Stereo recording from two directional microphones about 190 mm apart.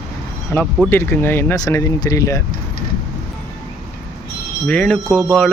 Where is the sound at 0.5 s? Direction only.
15° left (ahead or behind).